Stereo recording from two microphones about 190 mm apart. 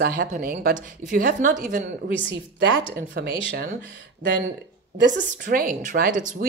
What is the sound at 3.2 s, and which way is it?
Speech, 55° right (ahead or behind).